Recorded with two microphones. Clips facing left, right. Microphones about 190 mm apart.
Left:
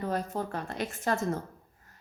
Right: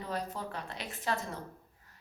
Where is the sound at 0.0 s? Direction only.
50° left (ahead or behind).